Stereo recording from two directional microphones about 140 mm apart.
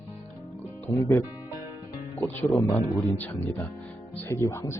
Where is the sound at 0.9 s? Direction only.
15° left (ahead or behind).